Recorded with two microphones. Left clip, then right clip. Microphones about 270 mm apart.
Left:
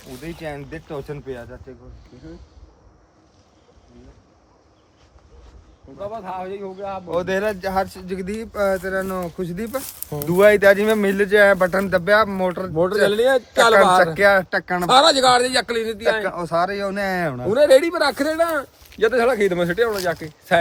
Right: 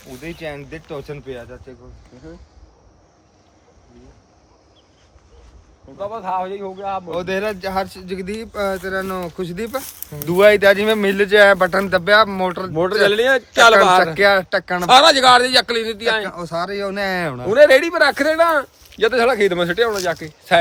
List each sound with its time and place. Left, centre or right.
0.0 s speech: centre
6.0 s a man's voice: centre
7.1 s speech: centre
13.1 s speech: centre
14.2 s speech: centre
14.8 s a man's voice: centre
15.5 s speech: centre
16.2 s speech: left; by 17.5 s centre
17.7 s a man's voice: centre
18.9 s speech: centre